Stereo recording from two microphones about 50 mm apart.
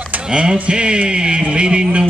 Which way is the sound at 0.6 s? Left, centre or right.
Right.